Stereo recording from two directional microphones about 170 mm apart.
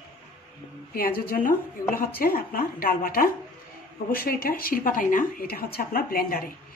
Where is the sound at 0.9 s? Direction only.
55° left (ahead or behind).